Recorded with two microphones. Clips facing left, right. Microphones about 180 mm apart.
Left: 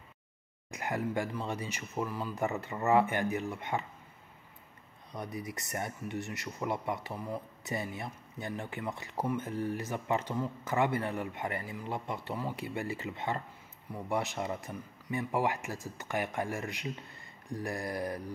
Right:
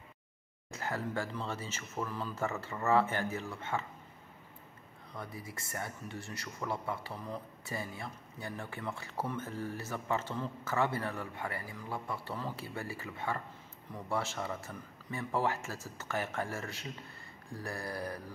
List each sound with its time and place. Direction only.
0.7 s speech: 15° left (ahead or behind)
5.1 s speech: 15° left (ahead or behind)